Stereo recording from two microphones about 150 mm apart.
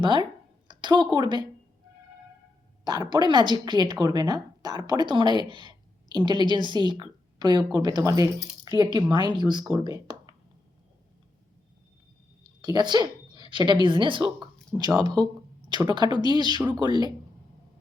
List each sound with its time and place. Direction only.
0.0 s speech: 30° right (ahead or behind)
2.8 s speech: 25° right (ahead or behind)
12.4 s a woman's voice: 30° right (ahead or behind)